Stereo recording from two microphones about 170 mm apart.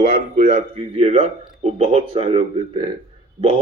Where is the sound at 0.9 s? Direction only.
40° right (ahead or behind).